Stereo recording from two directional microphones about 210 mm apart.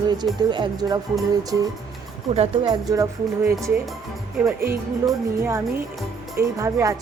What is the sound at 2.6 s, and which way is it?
Speech, 15° right (ahead or behind).